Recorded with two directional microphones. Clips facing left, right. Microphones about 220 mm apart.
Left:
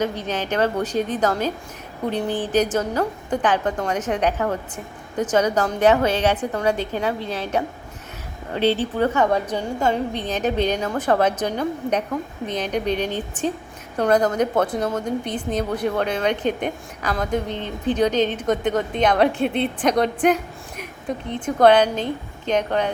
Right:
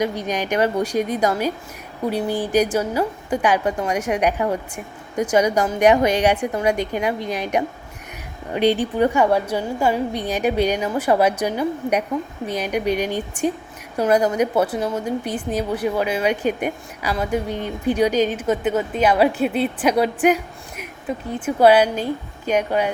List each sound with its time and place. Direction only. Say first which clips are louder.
0.0 s a woman's voice: right 2 dB; 10° right (ahead or behind)